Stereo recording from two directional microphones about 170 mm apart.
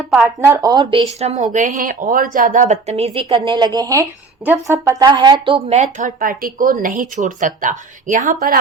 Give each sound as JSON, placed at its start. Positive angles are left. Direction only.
{"t": 0.3, "sound": "speech", "side_deg": -15}
{"t": 1.2, "sound": "speech", "side_deg": -40}
{"t": 5.0, "sound": "a woman's voice", "side_deg": -25}